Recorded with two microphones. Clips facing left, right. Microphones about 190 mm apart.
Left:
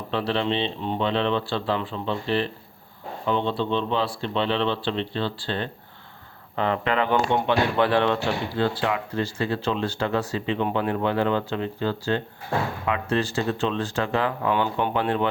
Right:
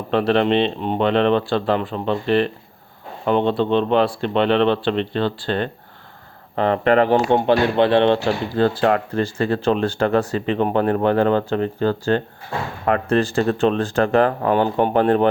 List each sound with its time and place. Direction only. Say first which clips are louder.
0.1 s speech: right 8 dB; 55° right (ahead or behind)
6.6 s speech: right 8 dB; 45° right (ahead or behind); by 8.2 s 25° right (ahead or behind)
8.2 s speech: right 6 dB; 45° right (ahead or behind)